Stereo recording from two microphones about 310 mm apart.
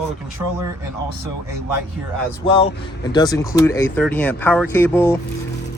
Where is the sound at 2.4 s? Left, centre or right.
Centre.